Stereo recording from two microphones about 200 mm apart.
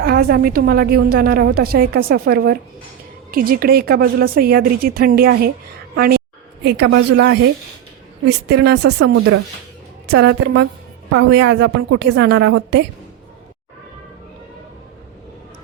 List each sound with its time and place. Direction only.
0.0 s a woman's voice: 50° right (ahead or behind)
6.7 s a woman's voice: 65° right (ahead or behind)
8.4 s a woman's voice: 55° right (ahead or behind); by 9.4 s 75° right (ahead or behind)
10.1 s a woman's voice: 60° right (ahead or behind)